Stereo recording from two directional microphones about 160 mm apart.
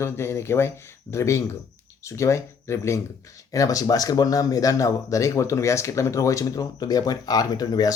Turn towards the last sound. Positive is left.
turn(degrees=25)  # may be behind; listen again after turning